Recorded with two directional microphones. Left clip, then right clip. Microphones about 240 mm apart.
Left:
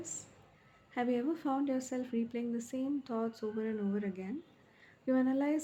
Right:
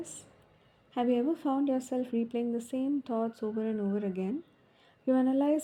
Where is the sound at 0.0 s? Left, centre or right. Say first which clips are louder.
Right 2 dB; right.